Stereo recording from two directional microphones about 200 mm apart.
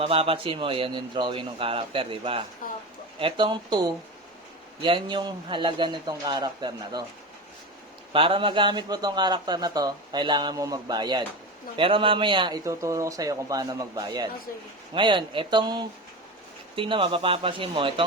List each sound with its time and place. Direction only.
0.0 s a man's voice: 30° right (ahead or behind)
8.1 s a man's voice: 25° right (ahead or behind)